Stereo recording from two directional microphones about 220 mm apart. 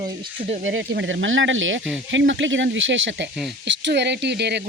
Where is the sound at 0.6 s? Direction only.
60° right (ahead or behind).